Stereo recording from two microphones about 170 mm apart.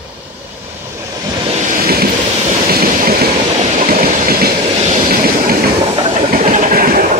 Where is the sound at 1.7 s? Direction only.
60° right (ahead or behind).